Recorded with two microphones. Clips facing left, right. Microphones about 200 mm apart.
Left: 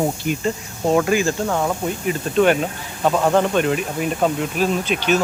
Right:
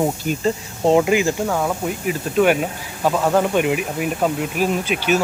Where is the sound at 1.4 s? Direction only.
5° right (ahead or behind).